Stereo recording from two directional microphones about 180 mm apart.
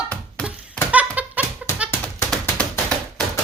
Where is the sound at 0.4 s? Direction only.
10° right (ahead or behind).